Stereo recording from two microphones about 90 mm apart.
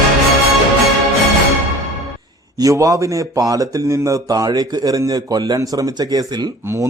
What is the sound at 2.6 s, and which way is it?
Speech, 40° right (ahead or behind).